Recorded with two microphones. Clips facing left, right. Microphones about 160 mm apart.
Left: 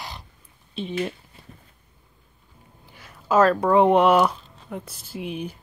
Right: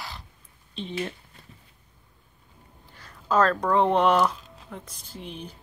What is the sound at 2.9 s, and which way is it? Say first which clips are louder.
Speech: left 4 dB; 10° left (ahead or behind).